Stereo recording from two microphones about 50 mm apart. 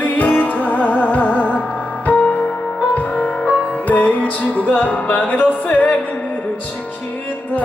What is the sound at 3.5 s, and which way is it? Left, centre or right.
Music, left.